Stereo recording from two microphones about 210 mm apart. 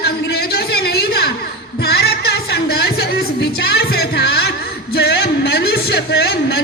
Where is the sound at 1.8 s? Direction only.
50° left (ahead or behind).